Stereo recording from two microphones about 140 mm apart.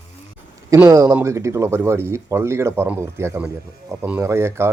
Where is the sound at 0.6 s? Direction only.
20° right (ahead or behind).